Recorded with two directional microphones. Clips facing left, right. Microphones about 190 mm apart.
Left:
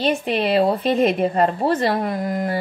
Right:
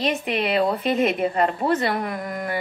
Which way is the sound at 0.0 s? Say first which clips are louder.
Left 3 dB; 30° left (ahead or behind).